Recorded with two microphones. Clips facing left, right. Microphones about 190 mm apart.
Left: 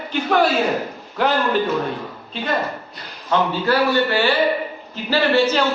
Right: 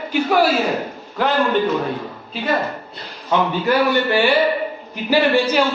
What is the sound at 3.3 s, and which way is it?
A man's voice, 15° right (ahead or behind).